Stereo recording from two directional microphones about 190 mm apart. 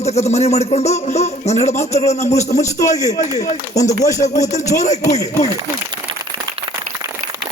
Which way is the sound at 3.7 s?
20° left (ahead or behind).